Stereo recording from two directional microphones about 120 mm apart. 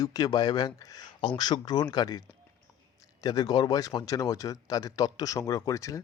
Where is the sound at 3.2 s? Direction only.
35° left (ahead or behind).